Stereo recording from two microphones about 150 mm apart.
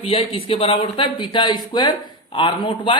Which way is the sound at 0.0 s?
40° left (ahead or behind).